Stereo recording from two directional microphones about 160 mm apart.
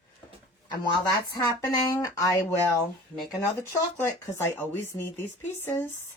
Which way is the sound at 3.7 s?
15° left (ahead or behind).